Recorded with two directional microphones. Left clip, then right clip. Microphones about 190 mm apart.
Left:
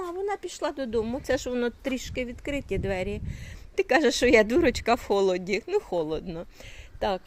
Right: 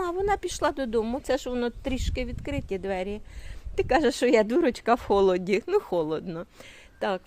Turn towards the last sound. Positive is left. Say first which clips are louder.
# left 1 dB
turn(degrees=-15)  # may be behind; listen again after turning